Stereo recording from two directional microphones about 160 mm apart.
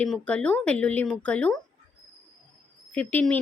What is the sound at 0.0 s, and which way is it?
Speech, 5° left (ahead or behind).